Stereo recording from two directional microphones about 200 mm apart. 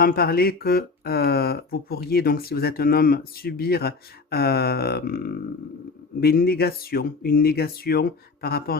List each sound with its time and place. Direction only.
0.0 s speech: 50° left (ahead or behind)